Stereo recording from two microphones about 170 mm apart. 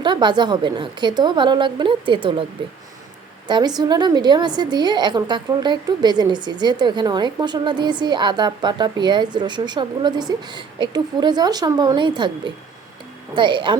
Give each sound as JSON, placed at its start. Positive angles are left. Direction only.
{"t": 0.0, "sound": "a woman's voice", "side_deg": -25}
{"t": 3.4, "sound": "a woman's voice", "side_deg": -25}